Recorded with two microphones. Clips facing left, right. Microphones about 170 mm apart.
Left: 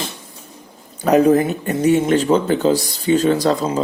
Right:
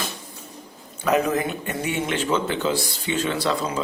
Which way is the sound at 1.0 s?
35° left (ahead or behind).